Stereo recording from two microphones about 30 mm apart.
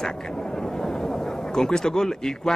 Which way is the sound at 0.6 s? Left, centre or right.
Centre.